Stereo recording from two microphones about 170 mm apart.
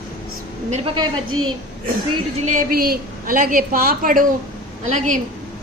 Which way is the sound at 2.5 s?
60° right (ahead or behind).